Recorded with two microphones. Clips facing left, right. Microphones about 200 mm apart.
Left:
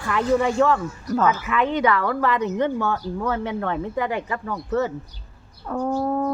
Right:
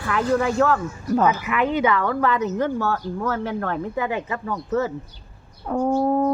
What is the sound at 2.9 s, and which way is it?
Speech, 10° left (ahead or behind).